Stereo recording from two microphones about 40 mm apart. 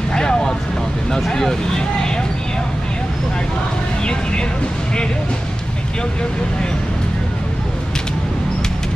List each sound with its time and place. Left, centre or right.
0.1 s vehicle: centre
1.3 s speech: centre
4.0 s speech: left